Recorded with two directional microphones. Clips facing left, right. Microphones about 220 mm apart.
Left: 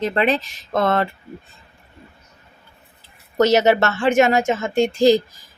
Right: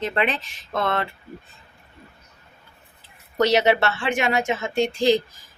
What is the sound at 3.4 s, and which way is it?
Speech, 45° left (ahead or behind).